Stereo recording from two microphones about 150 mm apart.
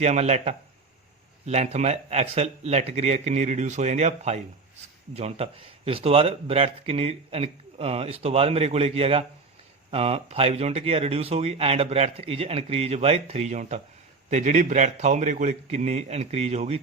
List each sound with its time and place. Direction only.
0.0 s speech: 50° right (ahead or behind)